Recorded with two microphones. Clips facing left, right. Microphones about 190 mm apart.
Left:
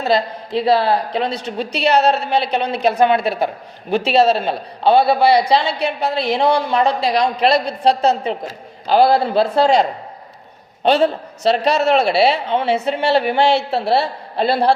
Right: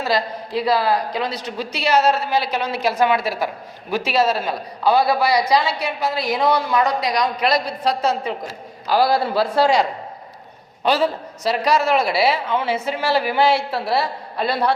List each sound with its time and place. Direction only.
0.0 s a man's voice: 25° left (ahead or behind)
10.8 s a man's voice: 25° left (ahead or behind)